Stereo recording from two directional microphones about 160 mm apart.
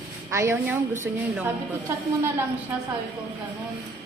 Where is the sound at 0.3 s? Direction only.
15° right (ahead or behind).